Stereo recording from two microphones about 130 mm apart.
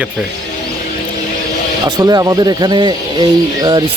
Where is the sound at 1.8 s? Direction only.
30° right (ahead or behind).